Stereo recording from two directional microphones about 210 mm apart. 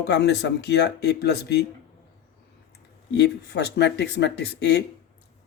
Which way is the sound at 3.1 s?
55° left (ahead or behind).